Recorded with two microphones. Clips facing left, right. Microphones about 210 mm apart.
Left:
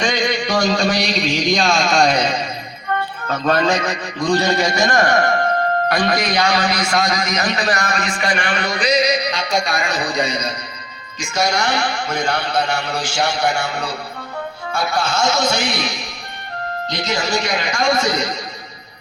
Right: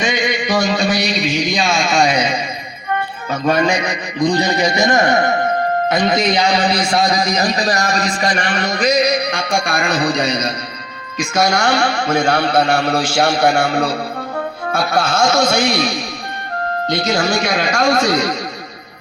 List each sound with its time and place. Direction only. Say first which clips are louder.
0.0 s a man's voice: right 1 dB; 5° right (ahead or behind); by 8.9 s 40° right (ahead or behind)
9.3 s a man's voice: right 2 dB; 50° right (ahead or behind)
17.1 s a man's voice: right 2 dB; 55° right (ahead or behind)